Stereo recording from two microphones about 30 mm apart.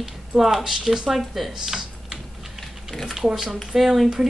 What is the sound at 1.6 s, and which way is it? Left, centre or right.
Typing, centre.